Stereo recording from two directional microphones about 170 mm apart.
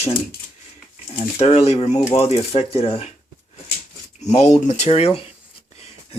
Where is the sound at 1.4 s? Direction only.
35° left (ahead or behind).